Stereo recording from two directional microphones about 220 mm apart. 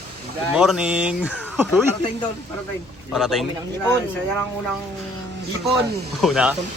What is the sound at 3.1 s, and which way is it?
Speech, centre (ahead or behind).